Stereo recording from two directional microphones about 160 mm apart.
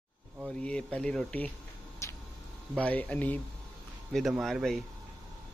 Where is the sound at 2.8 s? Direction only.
10° left (ahead or behind).